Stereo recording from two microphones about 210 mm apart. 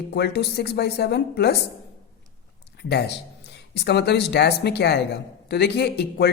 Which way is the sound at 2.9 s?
50° left (ahead or behind).